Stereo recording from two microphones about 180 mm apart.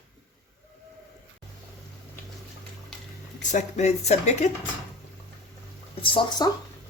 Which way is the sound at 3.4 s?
45° left (ahead or behind).